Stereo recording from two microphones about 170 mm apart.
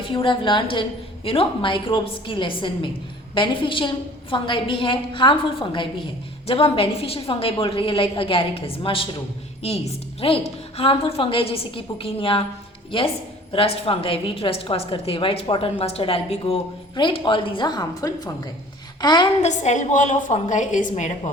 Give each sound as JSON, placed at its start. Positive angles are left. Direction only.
{"t": 0.0, "sound": "a woman's voice", "side_deg": 30}
{"t": 19.4, "sound": "a woman's voice", "side_deg": 45}